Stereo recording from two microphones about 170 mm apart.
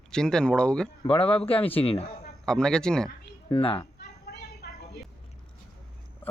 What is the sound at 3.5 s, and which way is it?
Speech, 35° left (ahead or behind).